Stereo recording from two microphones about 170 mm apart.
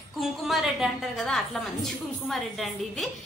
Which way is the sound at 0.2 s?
Centre (ahead or behind).